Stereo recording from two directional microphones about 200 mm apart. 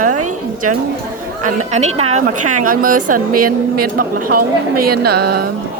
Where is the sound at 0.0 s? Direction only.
40° right (ahead or behind).